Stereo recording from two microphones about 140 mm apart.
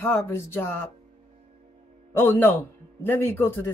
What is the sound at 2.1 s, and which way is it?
Speech, 15° left (ahead or behind).